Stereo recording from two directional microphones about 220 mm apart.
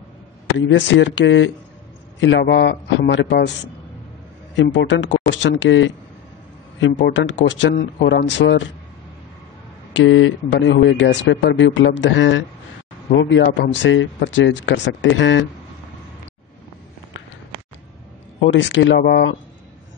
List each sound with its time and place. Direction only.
0.6 s a man's voice: 55° left (ahead or behind)
4.6 s speech: 55° left (ahead or behind)
7.0 s speech: 55° left (ahead or behind)
9.9 s speech: 60° left (ahead or behind)
18.4 s speech: 55° left (ahead or behind)